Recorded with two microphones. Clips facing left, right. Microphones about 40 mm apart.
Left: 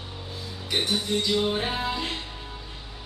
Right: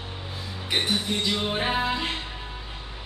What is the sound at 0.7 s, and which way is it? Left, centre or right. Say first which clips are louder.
Music: even; centre.